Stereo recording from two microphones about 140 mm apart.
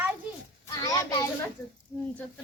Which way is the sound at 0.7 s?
25° left (ahead or behind).